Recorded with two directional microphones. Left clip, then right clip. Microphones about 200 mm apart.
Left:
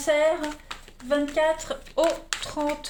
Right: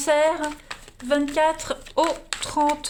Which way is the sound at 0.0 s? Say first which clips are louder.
Right 2 dB; 50° right (ahead or behind).